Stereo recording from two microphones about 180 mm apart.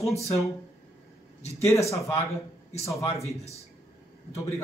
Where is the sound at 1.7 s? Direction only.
15° left (ahead or behind).